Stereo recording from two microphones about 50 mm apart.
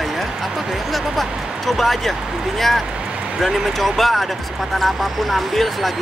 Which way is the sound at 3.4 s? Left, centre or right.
Centre.